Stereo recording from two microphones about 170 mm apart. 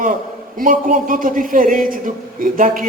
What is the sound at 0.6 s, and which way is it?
A man's voice, 55° right (ahead or behind).